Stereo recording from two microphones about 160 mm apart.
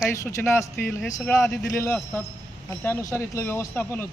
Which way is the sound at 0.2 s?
20° left (ahead or behind).